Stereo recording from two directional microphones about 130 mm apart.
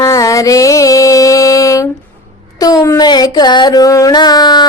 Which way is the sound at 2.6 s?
25° left (ahead or behind).